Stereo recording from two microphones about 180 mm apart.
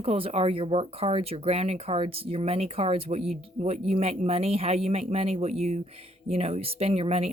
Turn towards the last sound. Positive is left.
turn(degrees=-35)  # may be behind; listen again after turning